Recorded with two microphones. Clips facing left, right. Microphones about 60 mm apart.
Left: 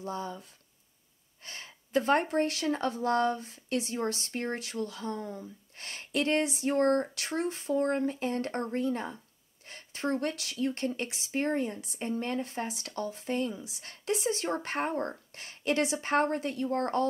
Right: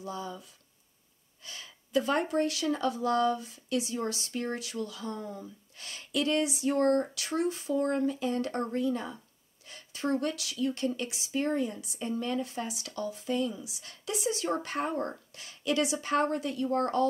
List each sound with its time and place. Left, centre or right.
0.0 s speech: left